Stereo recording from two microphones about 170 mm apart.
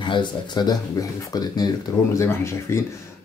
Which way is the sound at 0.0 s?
30° left (ahead or behind).